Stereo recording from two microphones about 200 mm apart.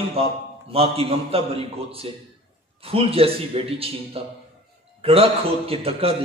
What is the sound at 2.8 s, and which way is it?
A man's voice, 30° right (ahead or behind).